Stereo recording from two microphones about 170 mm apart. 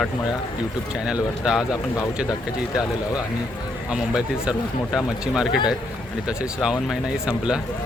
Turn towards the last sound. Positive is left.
turn(degrees=-5)  # may be behind; listen again after turning